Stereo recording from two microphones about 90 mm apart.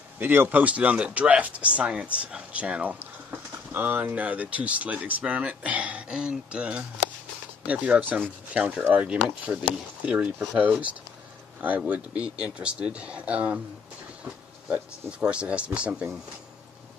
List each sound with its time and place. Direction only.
0.2 s speech: 20° right (ahead or behind)
11.9 s speech: 10° right (ahead or behind)
14.7 s speech: 10° right (ahead or behind)